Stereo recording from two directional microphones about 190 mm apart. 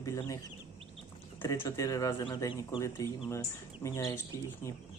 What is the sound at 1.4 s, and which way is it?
Speech, 15° left (ahead or behind).